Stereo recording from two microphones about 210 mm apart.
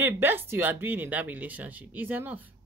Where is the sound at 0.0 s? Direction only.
10° right (ahead or behind).